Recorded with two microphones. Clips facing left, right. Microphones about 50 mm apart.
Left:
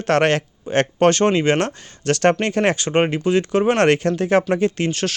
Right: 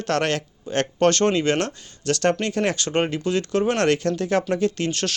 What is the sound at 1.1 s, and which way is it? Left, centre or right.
Speech, centre.